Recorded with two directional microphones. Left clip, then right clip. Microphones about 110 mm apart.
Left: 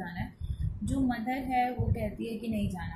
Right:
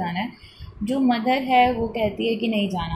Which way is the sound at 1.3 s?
25° right (ahead or behind).